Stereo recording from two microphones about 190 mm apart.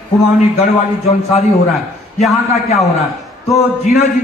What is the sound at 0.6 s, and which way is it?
Speech, 35° left (ahead or behind).